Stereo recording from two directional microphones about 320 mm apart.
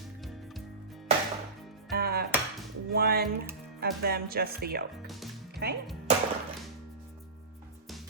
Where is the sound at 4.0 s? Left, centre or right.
Right.